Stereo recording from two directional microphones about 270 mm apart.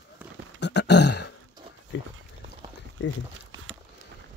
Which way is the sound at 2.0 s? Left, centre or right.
Left.